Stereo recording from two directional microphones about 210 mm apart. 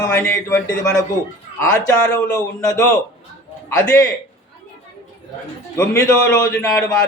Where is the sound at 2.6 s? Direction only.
15° left (ahead or behind).